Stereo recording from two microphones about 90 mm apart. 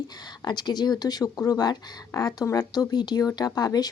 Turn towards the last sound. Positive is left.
turn(degrees=45)  # may be behind; listen again after turning